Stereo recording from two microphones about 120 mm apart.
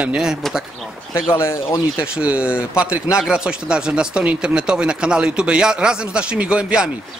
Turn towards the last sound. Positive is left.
turn(degrees=-5)  # may be behind; listen again after turning